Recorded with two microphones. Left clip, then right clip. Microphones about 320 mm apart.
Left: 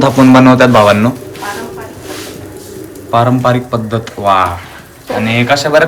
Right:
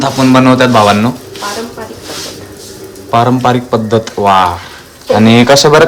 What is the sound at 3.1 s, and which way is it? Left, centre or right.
Speech, centre.